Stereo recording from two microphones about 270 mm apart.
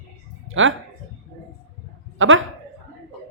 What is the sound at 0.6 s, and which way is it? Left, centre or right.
Speech, right.